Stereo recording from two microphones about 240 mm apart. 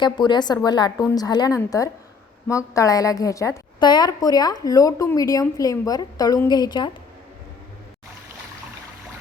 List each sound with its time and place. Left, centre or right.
0.0 s a woman's voice: centre